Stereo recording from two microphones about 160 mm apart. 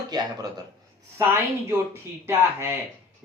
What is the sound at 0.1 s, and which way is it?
Speech, 25° right (ahead or behind).